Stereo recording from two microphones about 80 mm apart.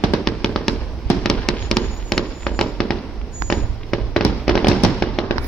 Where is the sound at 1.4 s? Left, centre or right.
Centre.